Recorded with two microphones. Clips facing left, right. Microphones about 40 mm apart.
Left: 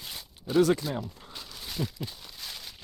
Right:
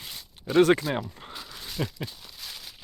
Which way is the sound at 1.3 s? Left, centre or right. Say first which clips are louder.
Right 2 dB; centre.